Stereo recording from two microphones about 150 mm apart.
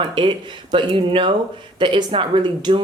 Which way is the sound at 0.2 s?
35° right (ahead or behind).